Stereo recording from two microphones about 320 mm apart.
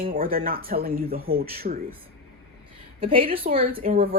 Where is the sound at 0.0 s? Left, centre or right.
Right.